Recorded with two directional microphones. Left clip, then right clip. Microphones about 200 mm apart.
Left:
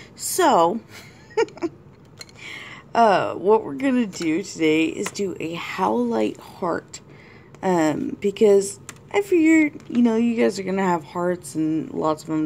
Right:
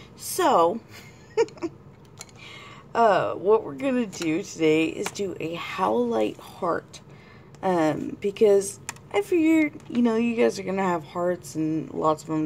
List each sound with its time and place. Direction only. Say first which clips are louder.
0.3 s speech: left 3 dB; 20° left (ahead or behind)